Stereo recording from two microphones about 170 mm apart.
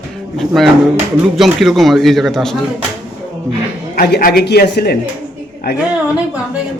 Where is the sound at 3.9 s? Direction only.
65° left (ahead or behind).